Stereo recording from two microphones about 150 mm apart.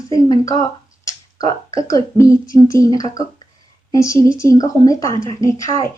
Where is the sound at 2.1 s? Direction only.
20° left (ahead or behind).